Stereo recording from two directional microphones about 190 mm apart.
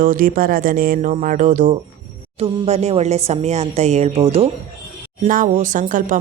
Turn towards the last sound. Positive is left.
turn(degrees=-45)  # may be behind; listen again after turning